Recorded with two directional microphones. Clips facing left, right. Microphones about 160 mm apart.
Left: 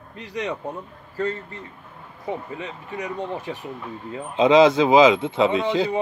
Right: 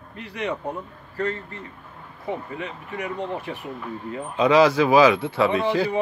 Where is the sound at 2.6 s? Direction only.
20° left (ahead or behind).